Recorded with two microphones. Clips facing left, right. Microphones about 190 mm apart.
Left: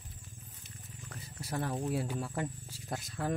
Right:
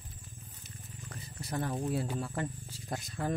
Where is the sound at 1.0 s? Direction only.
5° left (ahead or behind).